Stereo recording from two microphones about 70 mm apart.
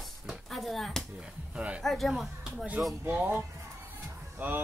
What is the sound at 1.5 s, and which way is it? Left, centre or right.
Speech, centre.